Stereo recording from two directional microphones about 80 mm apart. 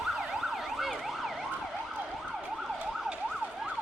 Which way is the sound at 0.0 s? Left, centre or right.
Centre.